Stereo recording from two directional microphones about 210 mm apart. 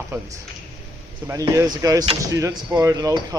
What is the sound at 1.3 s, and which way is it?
A man's voice, 15° right (ahead or behind).